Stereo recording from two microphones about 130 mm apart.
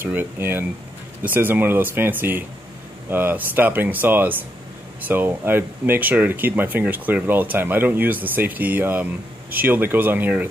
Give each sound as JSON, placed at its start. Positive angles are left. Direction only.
{"t": 0.0, "sound": "speech", "side_deg": -15}